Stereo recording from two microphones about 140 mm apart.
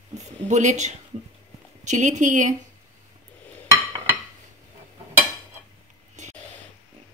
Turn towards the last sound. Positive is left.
turn(degrees=-60)  # may be behind; listen again after turning